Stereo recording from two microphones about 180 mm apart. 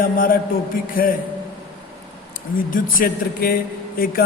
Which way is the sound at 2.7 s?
50° left (ahead or behind).